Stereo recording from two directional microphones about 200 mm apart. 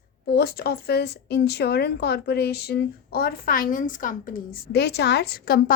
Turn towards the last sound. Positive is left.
turn(degrees=45)  # may be behind; listen again after turning